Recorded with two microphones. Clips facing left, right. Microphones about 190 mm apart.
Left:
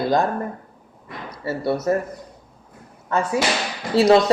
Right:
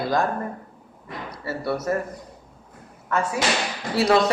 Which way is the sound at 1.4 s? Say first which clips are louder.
Left 4 dB; 25° left (ahead or behind).